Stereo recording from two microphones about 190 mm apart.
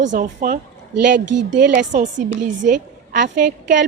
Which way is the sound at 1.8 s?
40° right (ahead or behind).